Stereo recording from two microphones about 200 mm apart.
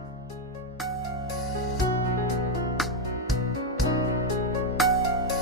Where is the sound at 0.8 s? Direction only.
Centre (ahead or behind).